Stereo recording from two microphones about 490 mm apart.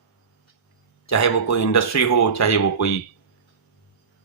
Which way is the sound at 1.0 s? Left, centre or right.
Left.